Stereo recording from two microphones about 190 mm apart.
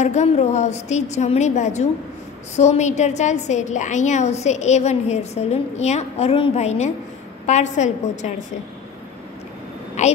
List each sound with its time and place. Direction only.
0.0 s a woman's voice: 35° left (ahead or behind)
10.0 s a woman's voice: 35° left (ahead or behind)